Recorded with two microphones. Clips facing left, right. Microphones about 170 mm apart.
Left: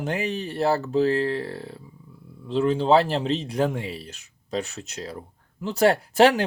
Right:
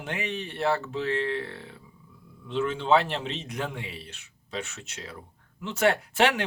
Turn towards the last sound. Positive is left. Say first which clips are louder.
# left 7 dB
turn(degrees=35)  # may be behind; listen again after turning